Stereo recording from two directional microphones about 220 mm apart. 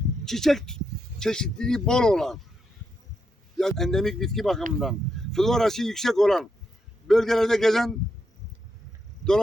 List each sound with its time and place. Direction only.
0.3 s speech: centre (ahead or behind)
3.6 s speech: centre (ahead or behind)